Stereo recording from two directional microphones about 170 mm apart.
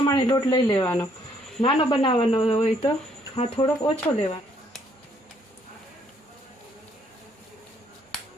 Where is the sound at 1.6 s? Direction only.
30° left (ahead or behind).